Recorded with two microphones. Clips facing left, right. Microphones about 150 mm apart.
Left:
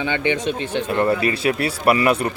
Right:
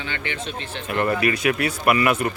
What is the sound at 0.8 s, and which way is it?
Speech, 25° left (ahead or behind).